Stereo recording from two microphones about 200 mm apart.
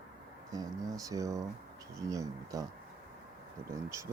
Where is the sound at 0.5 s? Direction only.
15° right (ahead or behind).